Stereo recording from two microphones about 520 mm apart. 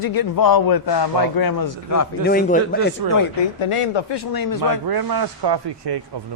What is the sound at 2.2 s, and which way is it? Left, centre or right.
Speech, centre.